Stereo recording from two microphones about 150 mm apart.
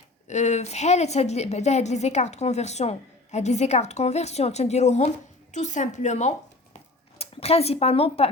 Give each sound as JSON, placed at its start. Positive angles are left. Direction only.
{"t": 0.3, "sound": "a woman's voice", "side_deg": 50}